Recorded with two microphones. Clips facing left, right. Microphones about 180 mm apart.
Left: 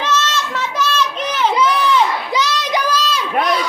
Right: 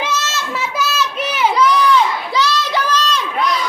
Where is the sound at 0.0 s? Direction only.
10° right (ahead or behind).